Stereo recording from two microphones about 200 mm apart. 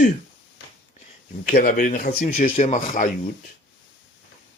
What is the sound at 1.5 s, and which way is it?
Speech, 45° left (ahead or behind).